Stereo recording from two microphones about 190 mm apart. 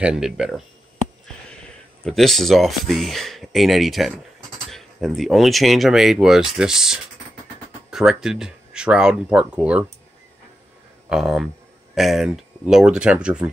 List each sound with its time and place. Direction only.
0.0 s speech: 5° right (ahead or behind)
2.0 s speech: centre (ahead or behind)
11.1 s speech: centre (ahead or behind)